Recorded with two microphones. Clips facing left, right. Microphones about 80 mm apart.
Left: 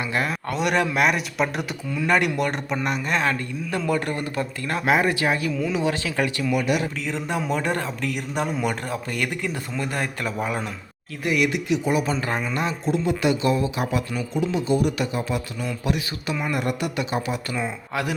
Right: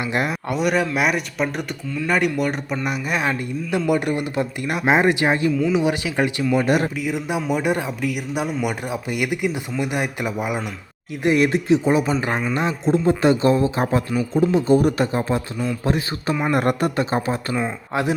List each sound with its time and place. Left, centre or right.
0.0 s speech: right
0.4 s speech: centre
6.5 s speech: right
7.0 s speech: centre
11.2 s speech: right
16.4 s speech: right
17.5 s speech: right